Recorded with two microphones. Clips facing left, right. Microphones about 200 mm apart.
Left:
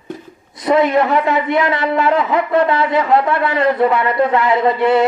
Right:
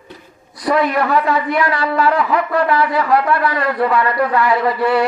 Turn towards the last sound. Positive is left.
turn(degrees=20)  # may be behind; listen again after turning